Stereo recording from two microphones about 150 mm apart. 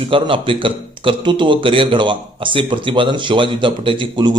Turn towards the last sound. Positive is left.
turn(degrees=-30)  # may be behind; listen again after turning